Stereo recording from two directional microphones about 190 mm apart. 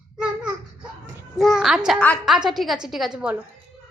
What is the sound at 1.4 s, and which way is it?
Speech, centre (ahead or behind).